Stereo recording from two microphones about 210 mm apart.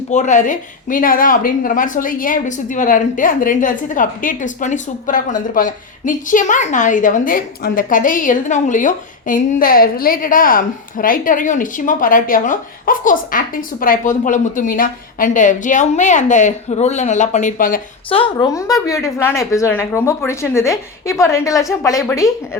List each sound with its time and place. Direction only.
0.1 s a woman's voice: 35° left (ahead or behind)
18.1 s a woman's voice: 20° left (ahead or behind)